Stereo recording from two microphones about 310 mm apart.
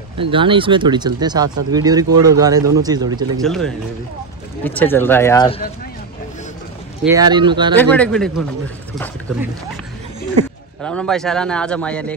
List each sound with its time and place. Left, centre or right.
0.2 s speech: centre
3.4 s speech: centre
7.0 s speech: centre
7.7 s speech: centre
10.8 s speech: centre